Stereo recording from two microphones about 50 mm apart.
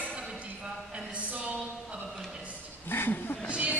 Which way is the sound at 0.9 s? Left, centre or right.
Right.